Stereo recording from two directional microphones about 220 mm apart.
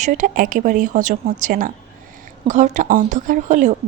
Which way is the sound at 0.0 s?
35° right (ahead or behind).